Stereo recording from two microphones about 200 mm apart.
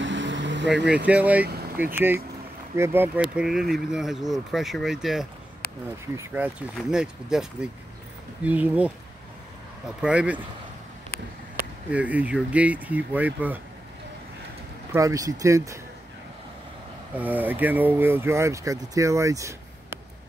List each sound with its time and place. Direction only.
0.0 s vehicle: 65° right (ahead or behind)
0.8 s speech: 5° right (ahead or behind)
8.5 s speech: 5° right (ahead or behind)
10.0 s speech: 5° right (ahead or behind)
11.9 s speech: 5° right (ahead or behind)
14.9 s speech: 15° right (ahead or behind)
17.1 s speech: 10° right (ahead or behind)